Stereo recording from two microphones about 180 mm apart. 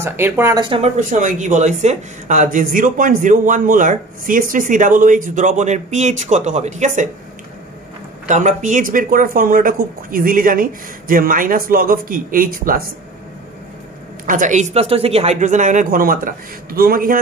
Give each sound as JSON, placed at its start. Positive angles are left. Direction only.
{"t": 0.0, "sound": "speech", "side_deg": -15}
{"t": 0.7, "sound": "speech", "side_deg": -35}
{"t": 0.9, "sound": "speech", "side_deg": -45}
{"t": 8.3, "sound": "speech", "side_deg": -40}
{"t": 14.2, "sound": "speech", "side_deg": -45}